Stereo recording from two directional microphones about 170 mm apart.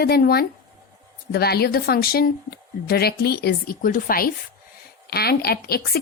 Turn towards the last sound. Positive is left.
turn(degrees=65)  # may be behind; listen again after turning